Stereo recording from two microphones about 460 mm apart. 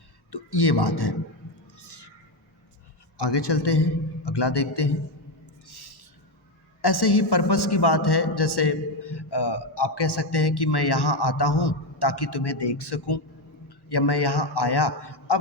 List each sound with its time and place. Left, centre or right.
0.3 s speech: left
1.8 s neigh: left
3.2 s a man's voice: left
5.6 s a sound: left
6.8 s a man's voice: left